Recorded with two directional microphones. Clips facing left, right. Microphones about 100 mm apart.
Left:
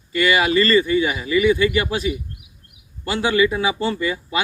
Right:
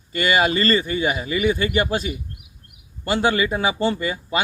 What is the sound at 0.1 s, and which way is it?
Speech, 40° right (ahead or behind).